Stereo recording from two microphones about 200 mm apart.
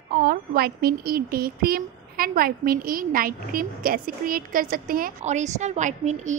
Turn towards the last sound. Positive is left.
turn(degrees=-35)  # may be behind; listen again after turning